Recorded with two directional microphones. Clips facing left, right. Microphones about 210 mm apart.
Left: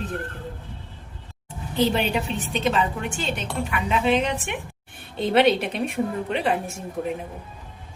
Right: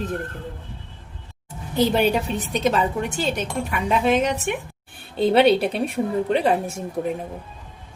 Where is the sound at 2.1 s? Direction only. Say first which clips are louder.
Right 2 dB; 40° right (ahead or behind).